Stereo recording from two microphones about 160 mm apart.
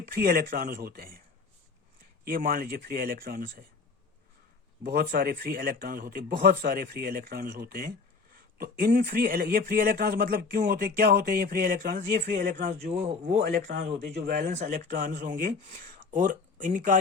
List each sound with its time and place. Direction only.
0.1 s a man's voice: 65° right (ahead or behind)
2.2 s speech: 65° right (ahead or behind)
4.8 s a man's voice: 70° right (ahead or behind); by 12.4 s 90° right
12.4 s speech: 55° right (ahead or behind)